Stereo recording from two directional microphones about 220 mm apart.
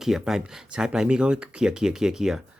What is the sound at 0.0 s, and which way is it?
Speech, centre (ahead or behind).